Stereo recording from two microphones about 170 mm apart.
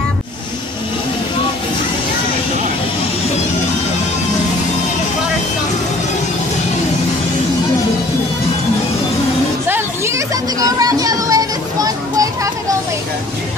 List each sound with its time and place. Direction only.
9.7 s music: 15° right (ahead or behind)